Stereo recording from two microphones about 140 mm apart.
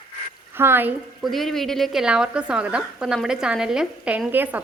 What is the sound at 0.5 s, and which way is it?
Speech, 15° right (ahead or behind).